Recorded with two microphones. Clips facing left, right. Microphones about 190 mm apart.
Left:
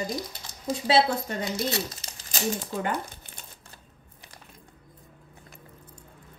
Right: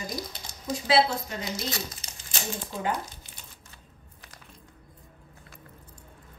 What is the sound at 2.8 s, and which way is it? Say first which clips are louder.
Speech: left 1 dB; 55° left (ahead or behind).